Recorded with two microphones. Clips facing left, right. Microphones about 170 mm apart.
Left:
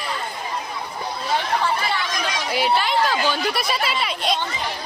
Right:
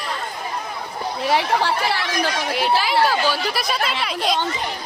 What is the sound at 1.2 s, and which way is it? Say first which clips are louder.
Speech: right 3 dB; 80° right.